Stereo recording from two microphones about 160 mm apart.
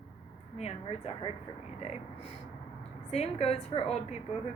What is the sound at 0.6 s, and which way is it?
Speech, 40° left (ahead or behind).